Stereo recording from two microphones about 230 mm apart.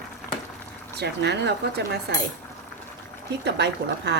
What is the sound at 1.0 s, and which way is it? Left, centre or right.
Speech, right.